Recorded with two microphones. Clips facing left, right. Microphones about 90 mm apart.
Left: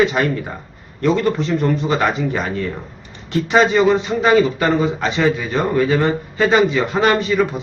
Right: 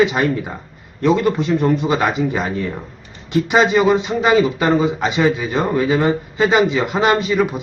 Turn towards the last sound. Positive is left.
turn(degrees=-15)  # may be behind; listen again after turning